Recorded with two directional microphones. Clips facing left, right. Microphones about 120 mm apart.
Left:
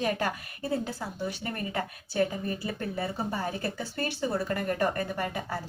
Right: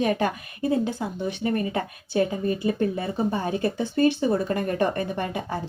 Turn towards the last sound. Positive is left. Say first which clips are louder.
# right 4 dB
turn(degrees=-20)  # may be behind; listen again after turning